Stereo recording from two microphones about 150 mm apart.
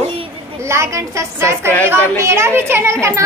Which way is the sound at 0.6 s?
20° right (ahead or behind).